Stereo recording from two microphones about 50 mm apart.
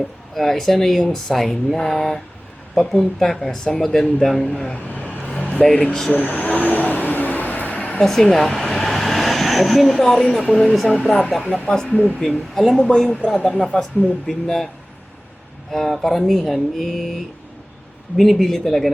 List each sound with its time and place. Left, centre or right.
0.3 s speech: centre
4.9 s vehicle: left
5.4 s speech: left
5.6 s speech: centre
6.1 s vehicle: left
8.0 s speech: centre
8.5 s vehicle: centre
9.9 s speech: centre
11.7 s speech: centre
15.7 s speech: centre
18.2 s speech: centre